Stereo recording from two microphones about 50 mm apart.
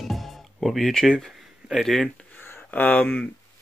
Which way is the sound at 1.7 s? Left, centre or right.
Centre.